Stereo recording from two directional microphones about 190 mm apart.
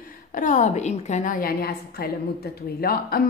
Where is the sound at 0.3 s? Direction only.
40° left (ahead or behind).